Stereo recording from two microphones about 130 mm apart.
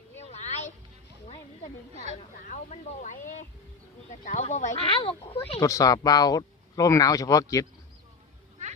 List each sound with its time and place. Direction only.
0.3 s a sound: 60° left (ahead or behind)
2.5 s speech: 70° left (ahead or behind)
4.8 s speech: 45° left (ahead or behind)
5.5 s speech: 25° left (ahead or behind)